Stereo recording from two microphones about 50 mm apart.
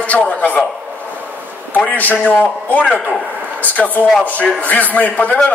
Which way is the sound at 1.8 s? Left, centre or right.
Left.